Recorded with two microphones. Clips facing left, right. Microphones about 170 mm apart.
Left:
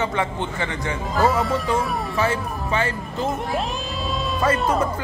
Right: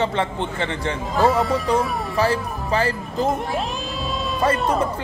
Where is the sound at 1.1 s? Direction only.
Centre (ahead or behind).